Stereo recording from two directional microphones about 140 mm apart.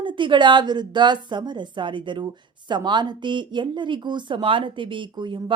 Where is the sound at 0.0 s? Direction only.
35° right (ahead or behind).